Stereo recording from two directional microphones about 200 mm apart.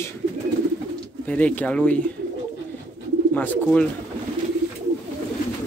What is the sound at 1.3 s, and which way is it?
Speech, 5° left (ahead or behind).